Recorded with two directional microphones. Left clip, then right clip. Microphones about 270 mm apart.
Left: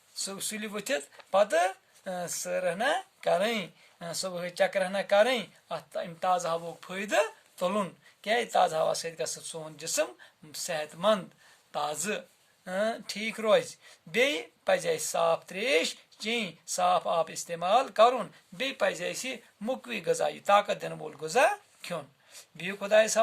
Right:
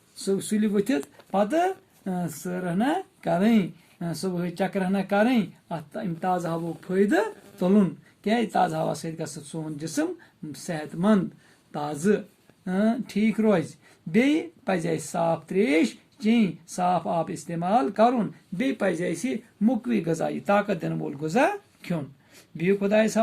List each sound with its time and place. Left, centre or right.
0.2 s speech: left